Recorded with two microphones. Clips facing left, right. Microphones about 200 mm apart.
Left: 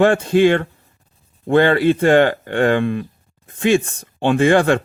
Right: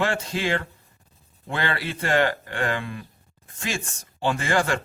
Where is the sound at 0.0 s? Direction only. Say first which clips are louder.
Left 13 dB; 55° left (ahead or behind).